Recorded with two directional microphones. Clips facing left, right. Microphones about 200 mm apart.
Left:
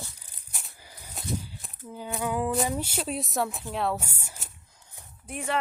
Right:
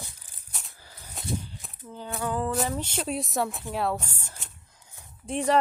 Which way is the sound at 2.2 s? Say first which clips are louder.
Left 1 dB; 10° left (ahead or behind).